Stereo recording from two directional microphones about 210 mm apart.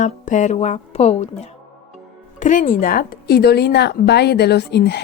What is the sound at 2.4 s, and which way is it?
Speech, 40° left (ahead or behind).